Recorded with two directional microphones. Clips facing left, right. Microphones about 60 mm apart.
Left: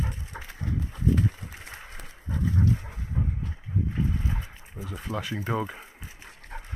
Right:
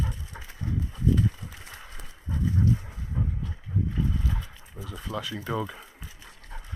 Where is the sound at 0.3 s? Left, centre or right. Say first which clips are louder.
Even; left.